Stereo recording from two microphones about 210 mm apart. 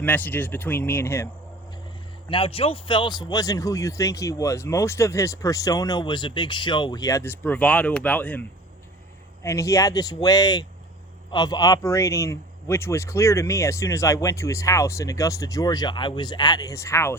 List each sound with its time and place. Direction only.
0.0 s speech: 10° left (ahead or behind)
2.3 s speech: 25° left (ahead or behind)